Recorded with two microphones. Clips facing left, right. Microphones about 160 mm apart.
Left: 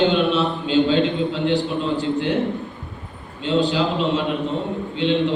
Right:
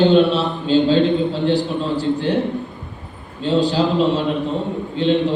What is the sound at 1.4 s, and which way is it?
Speech, 35° right (ahead or behind).